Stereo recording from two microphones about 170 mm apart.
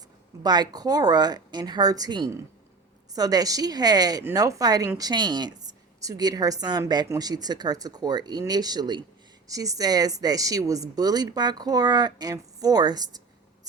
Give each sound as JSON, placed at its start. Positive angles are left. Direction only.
{"t": 0.4, "sound": "a woman's voice", "side_deg": -25}